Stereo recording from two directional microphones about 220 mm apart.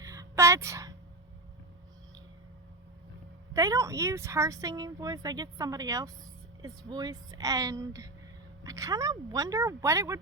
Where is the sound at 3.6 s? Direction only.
15° right (ahead or behind).